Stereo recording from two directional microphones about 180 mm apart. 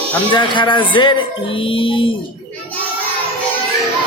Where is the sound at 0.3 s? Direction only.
25° left (ahead or behind).